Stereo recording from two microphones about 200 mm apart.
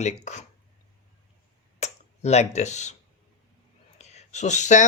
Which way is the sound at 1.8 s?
35° left (ahead or behind).